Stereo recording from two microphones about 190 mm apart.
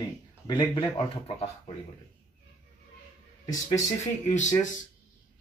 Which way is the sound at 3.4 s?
40° left (ahead or behind).